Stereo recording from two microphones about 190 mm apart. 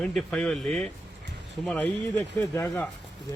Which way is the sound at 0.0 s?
Centre (ahead or behind).